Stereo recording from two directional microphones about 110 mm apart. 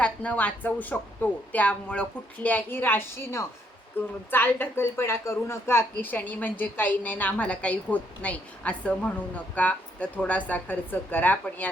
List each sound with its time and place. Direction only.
0.0 s a woman's voice: 10° left (ahead or behind)